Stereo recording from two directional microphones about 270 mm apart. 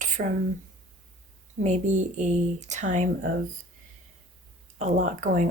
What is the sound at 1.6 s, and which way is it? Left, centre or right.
Speech, right.